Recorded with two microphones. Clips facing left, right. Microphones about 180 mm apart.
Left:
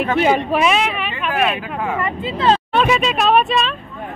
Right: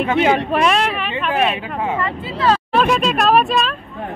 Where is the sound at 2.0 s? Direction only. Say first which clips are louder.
Left 1 dB; 20° left (ahead or behind).